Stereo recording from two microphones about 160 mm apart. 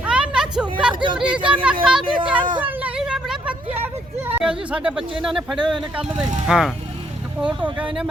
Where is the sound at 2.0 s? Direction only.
30° right (ahead or behind).